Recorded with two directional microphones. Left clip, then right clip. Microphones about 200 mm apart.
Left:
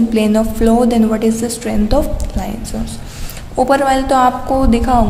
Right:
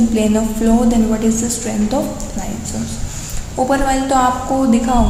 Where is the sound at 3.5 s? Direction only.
45° left (ahead or behind).